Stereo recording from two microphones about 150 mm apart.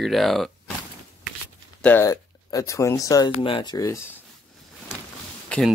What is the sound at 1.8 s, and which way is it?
Speech, 10° left (ahead or behind).